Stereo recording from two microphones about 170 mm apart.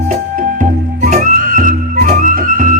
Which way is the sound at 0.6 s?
50° right (ahead or behind).